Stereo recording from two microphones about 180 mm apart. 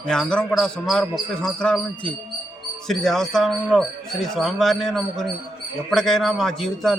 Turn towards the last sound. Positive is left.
turn(degrees=0)  # may be behind; listen again after turning